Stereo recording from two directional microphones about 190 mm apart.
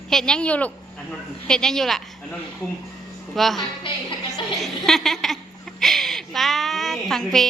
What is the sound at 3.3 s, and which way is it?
Speech, centre (ahead or behind).